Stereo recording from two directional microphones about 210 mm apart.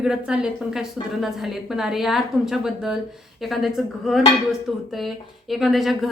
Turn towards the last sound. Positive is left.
turn(degrees=0)  # may be behind; listen again after turning